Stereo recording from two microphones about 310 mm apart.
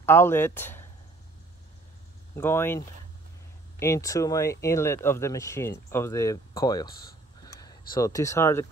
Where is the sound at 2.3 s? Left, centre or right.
Centre.